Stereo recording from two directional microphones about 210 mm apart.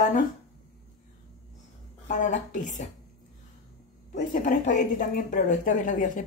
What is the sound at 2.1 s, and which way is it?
Speech, 35° left (ahead or behind).